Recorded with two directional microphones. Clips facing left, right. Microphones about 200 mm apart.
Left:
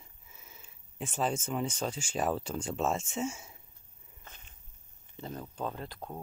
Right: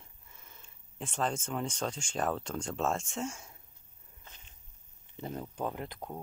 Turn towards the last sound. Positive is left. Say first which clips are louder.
# right 1 dB
turn(degrees=-20)  # may be behind; listen again after turning